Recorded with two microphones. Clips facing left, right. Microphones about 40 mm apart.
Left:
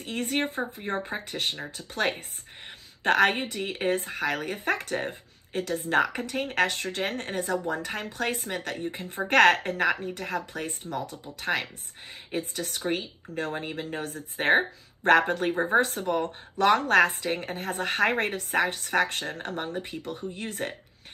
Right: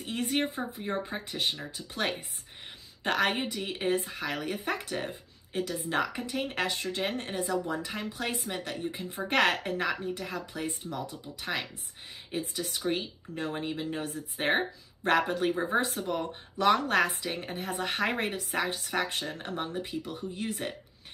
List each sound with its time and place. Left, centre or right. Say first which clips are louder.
0.0 s a woman's voice: left 1 dB; left
11.4 s speech: left 5 dB; left
12.4 s a woman's voice: left 2 dB; left
13.3 s speech: left 5 dB; left
13.7 s a woman's voice: left 1 dB; left